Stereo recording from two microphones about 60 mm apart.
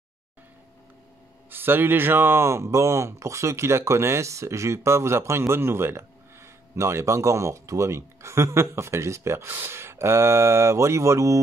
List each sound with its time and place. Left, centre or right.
1.5 s speech: right